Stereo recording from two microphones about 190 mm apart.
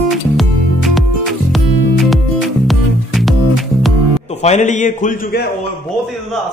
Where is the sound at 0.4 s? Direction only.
Centre (ahead or behind).